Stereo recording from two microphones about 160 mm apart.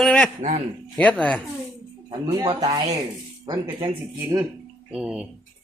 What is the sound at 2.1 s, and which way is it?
Speech, 25° right (ahead or behind).